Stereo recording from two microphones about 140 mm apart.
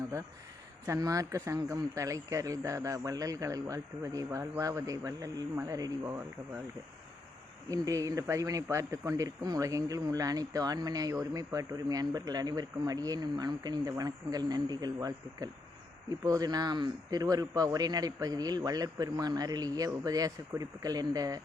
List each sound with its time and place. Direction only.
0.9 s speech: 25° right (ahead or behind)
7.7 s speech: 25° right (ahead or behind)